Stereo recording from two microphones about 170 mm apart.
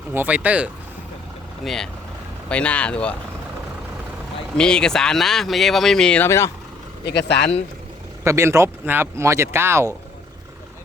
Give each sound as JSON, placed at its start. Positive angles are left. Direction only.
{"t": 0.1, "sound": "speech", "side_deg": -10}
{"t": 1.6, "sound": "speech", "side_deg": 0}
{"t": 4.5, "sound": "speech", "side_deg": 5}
{"t": 6.2, "sound": "speech", "side_deg": 15}
{"t": 7.0, "sound": "speech", "side_deg": 90}
{"t": 8.2, "sound": "speech", "side_deg": -15}